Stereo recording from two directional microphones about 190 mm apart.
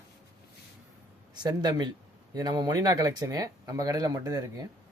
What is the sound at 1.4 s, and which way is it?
Speech, 20° right (ahead or behind).